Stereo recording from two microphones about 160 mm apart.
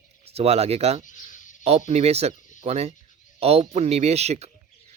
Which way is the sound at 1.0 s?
55° left (ahead or behind).